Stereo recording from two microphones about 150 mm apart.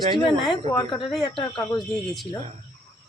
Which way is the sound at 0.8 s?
30° left (ahead or behind).